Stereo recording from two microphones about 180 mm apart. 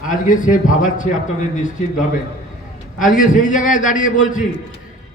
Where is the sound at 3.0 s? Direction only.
45° left (ahead or behind).